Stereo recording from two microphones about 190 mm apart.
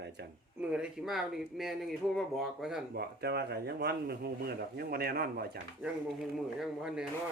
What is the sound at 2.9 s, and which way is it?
Speech, 55° right (ahead or behind).